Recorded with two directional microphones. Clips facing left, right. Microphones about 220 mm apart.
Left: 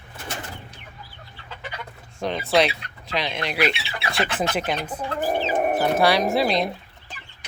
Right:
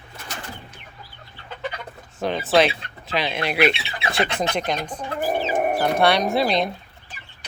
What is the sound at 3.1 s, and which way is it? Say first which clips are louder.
Speech: right 2 dB; 5° right (ahead or behind).